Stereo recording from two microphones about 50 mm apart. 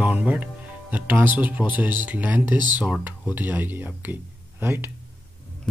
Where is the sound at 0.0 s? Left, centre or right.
Right.